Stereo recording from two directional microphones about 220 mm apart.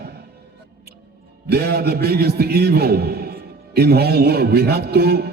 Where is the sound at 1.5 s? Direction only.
45° right (ahead or behind).